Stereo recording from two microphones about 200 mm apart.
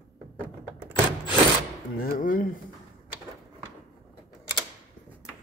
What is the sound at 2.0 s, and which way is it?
Speech, 45° left (ahead or behind).